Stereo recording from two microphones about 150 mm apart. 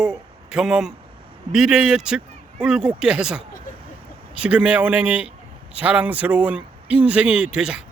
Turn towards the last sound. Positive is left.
turn(degrees=-5)  # may be behind; listen again after turning